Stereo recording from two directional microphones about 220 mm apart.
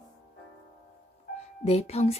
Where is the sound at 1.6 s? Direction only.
30° left (ahead or behind).